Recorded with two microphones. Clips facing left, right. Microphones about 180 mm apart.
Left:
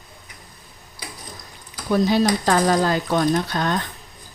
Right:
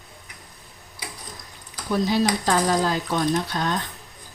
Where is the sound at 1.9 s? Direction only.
60° left (ahead or behind).